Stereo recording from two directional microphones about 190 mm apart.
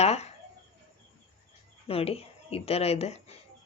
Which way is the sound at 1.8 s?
30° left (ahead or behind).